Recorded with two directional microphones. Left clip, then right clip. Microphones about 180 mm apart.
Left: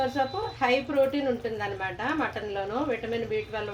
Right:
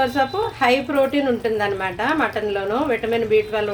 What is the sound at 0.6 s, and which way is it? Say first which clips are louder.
Speech: right 6 dB; 20° right (ahead or behind).